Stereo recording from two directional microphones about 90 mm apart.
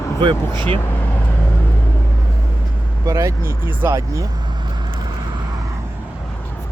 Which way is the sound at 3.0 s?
35° right (ahead or behind).